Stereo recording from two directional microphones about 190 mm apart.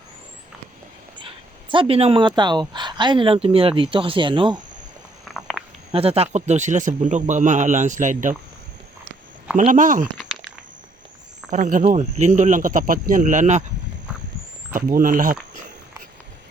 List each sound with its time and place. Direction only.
1.7 s speech: 30° right (ahead or behind)
5.2 s walk: centre (ahead or behind)
5.9 s speech: 30° right (ahead or behind)
9.6 s speech: 40° right (ahead or behind)
11.5 s speech: 40° right (ahead or behind)
14.7 s speech: 45° right (ahead or behind)